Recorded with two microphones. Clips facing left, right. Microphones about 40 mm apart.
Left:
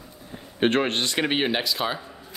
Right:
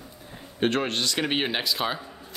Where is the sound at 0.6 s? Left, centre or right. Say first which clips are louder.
Left 3 dB; left.